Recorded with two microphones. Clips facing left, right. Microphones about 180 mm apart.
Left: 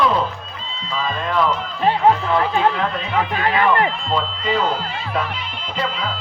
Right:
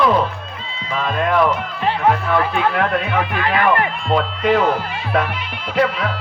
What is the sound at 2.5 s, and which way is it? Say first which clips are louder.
Speech: right 1 dB; 65° right (ahead or behind).